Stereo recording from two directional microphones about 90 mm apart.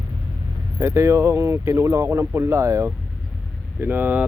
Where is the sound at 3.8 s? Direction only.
20° right (ahead or behind).